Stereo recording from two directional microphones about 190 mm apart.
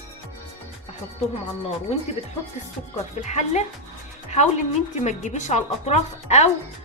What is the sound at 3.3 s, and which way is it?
Speech, 35° left (ahead or behind).